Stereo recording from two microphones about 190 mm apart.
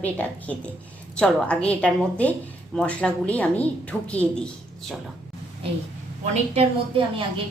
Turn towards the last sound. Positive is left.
turn(degrees=-30)  # may be behind; listen again after turning